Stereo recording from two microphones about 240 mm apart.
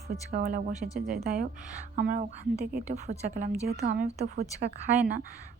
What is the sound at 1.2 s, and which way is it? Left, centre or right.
A woman's voice, right.